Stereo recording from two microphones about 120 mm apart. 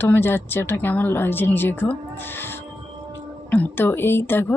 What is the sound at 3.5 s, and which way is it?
Speech, 15° left (ahead or behind).